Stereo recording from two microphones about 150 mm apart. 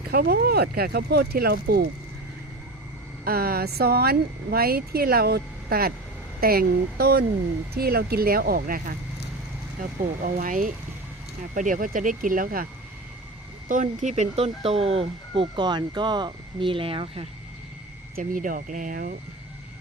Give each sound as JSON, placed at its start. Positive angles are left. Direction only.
{"t": 0.1, "sound": "speech", "side_deg": -90}
{"t": 3.2, "sound": "speech", "side_deg": -90}
{"t": 10.2, "sound": "speech", "side_deg": -65}
{"t": 14.0, "sound": "speech", "side_deg": -50}
{"t": 18.2, "sound": "speech", "side_deg": -65}